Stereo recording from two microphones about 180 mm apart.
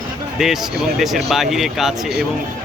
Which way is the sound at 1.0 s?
Centre (ahead or behind).